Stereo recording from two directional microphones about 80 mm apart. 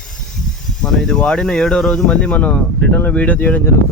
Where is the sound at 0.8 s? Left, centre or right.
Centre.